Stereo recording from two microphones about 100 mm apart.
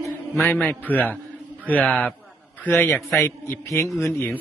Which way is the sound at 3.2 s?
25° left (ahead or behind).